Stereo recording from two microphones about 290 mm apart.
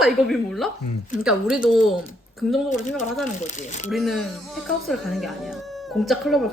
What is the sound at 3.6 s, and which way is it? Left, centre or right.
Speech, left.